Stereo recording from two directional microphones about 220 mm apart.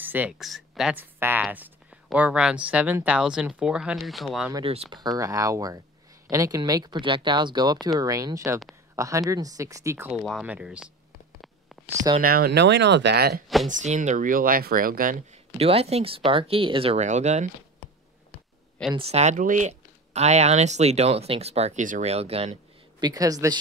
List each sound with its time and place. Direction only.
0.0 s speech: 10° right (ahead or behind)
4.6 s speech: 25° right (ahead or behind); by 10.9 s 5° right (ahead or behind)
11.7 s a sound: centre (ahead or behind)
12.2 s speech: 40° right (ahead or behind)
13.7 s speech: 35° right (ahead or behind)
15.5 s speech: 25° right (ahead or behind)
18.9 s speech: 30° right (ahead or behind)